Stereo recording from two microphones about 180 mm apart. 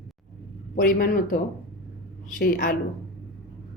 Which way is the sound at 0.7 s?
50° left (ahead or behind).